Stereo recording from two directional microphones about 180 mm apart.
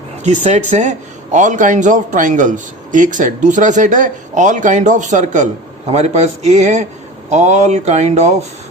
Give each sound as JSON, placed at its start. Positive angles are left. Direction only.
{"t": 0.3, "sound": "a man's voice", "side_deg": -40}